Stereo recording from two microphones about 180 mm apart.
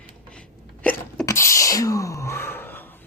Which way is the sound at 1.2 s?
15° left (ahead or behind).